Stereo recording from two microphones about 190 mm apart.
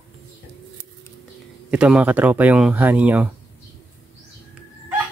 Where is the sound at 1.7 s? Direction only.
5° right (ahead or behind).